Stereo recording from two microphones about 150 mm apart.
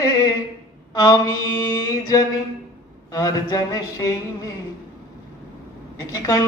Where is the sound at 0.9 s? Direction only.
25° left (ahead or behind).